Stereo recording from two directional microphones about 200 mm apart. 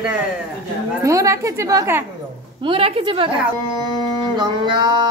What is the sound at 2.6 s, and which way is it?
Speech, 30° right (ahead or behind).